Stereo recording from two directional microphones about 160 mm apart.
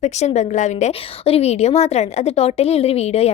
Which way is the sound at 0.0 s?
45° left (ahead or behind).